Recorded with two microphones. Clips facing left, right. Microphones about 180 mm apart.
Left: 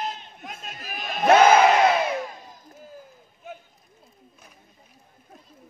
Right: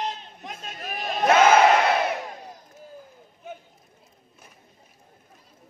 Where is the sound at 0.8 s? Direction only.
35° right (ahead or behind).